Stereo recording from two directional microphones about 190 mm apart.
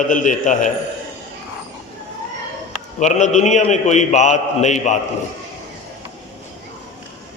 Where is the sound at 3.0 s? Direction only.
40° left (ahead or behind).